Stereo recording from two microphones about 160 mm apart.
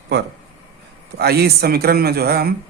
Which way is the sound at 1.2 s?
90° right.